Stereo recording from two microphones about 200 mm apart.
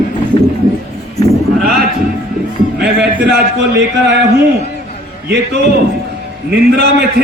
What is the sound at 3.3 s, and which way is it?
Speech, 55° right (ahead or behind).